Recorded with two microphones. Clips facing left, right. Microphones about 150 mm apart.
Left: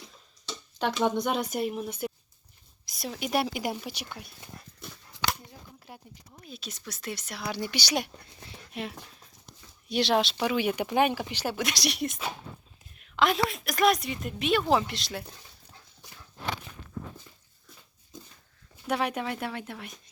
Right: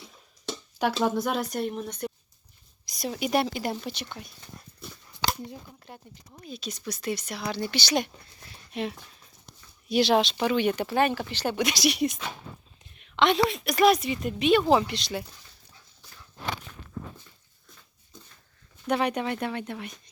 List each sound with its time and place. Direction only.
1.0 s a woman's voice: centre (ahead or behind)
5.2 s a sound: 35° right (ahead or behind)
5.9 s a woman's voice: 5° left (ahead or behind)
7.5 s speech: 10° left (ahead or behind)
11.5 s a woman's voice: centre (ahead or behind)
18.9 s a woman's voice: centre (ahead or behind)